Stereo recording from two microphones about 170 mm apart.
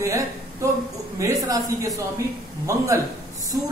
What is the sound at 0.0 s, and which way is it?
A woman's voice, 15° right (ahead or behind).